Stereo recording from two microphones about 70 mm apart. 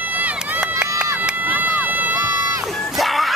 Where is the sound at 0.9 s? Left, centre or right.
Right.